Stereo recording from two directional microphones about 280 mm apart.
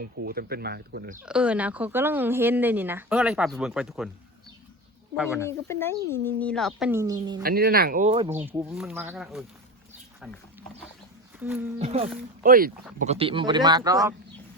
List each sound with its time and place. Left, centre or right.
0.0 s speech: right
1.2 s speech: centre
5.1 s speech: centre
5.4 s speech: centre
7.4 s speech: right
8.3 s speech: centre
11.3 s speech: centre
11.8 s speech: right